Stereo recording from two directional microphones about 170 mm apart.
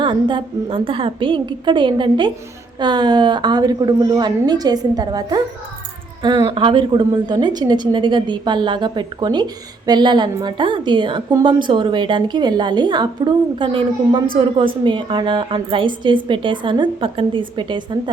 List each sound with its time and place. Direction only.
0.0 s a woman's voice: 30° right (ahead or behind)